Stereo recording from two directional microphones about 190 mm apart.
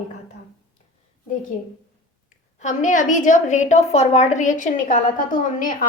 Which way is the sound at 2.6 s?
40° left (ahead or behind).